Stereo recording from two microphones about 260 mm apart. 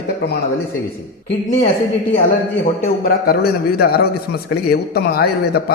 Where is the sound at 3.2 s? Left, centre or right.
Left.